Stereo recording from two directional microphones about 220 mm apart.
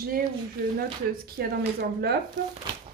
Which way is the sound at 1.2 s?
45° right (ahead or behind).